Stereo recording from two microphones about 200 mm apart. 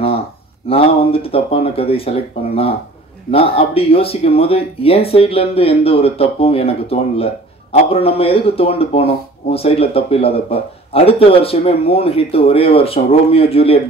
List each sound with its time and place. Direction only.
0.7 s speech: 30° left (ahead or behind)